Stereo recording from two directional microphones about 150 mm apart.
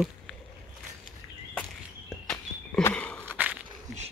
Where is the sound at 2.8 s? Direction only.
10° left (ahead or behind).